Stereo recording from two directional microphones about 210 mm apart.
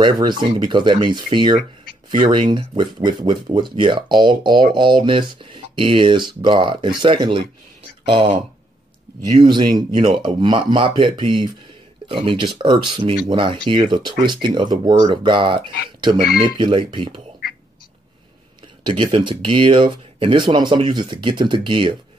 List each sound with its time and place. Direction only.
0.0 s speech: 20° right (ahead or behind)
9.4 s speech: 20° right (ahead or behind)
18.9 s speech: 25° right (ahead or behind)